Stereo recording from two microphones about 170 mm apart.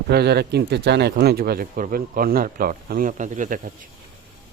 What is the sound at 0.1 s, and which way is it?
Speech, 70° right (ahead or behind).